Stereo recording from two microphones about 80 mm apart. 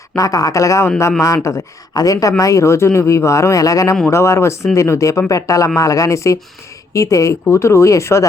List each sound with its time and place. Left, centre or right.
0.2 s speech: left
4.1 s speech: left